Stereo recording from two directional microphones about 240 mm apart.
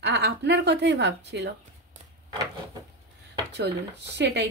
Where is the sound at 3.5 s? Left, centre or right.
Right.